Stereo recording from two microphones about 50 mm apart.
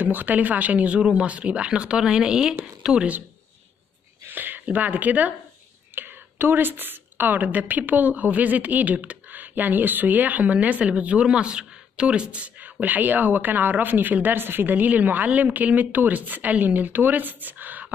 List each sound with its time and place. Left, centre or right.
0.0 s speech: right; by 3.1 s centre
4.3 s a sound: right
4.6 s a woman's voice: right
5.9 s a woman's voice: right